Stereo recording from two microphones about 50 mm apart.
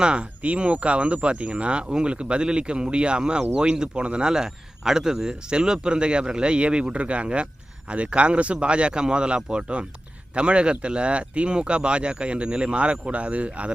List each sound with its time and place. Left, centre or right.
0.0 s a man's voice: centre